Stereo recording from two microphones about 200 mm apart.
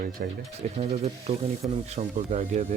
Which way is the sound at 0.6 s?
35° right (ahead or behind).